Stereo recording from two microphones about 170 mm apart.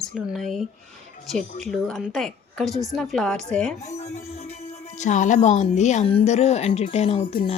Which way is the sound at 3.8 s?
40° left (ahead or behind).